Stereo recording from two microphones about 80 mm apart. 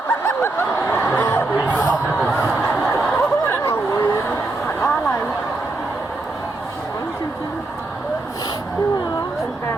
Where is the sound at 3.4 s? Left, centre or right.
Left.